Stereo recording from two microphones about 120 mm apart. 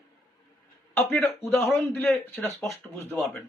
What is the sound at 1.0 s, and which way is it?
Speech, 15° left (ahead or behind).